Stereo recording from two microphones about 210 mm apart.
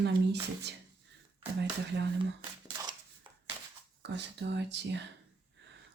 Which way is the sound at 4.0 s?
55° right (ahead or behind).